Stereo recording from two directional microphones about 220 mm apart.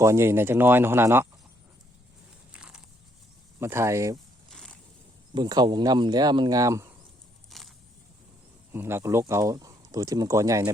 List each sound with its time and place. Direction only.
0.0 s speech: 10° right (ahead or behind)
2.5 s a sound: 5° right (ahead or behind)
3.6 s speech: 10° right (ahead or behind)
5.3 s speech: 20° right (ahead or behind)
7.5 s a sound: centre (ahead or behind)
8.7 s speech: 10° right (ahead or behind)